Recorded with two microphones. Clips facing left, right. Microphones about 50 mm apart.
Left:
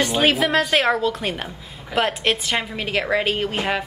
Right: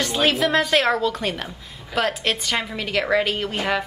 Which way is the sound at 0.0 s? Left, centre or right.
Centre.